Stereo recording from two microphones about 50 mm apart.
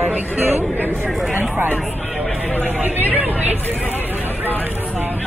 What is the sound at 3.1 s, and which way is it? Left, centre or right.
Speech, right.